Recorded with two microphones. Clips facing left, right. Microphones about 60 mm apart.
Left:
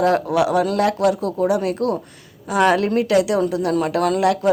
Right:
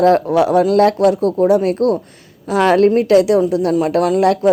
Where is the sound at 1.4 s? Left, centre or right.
Right.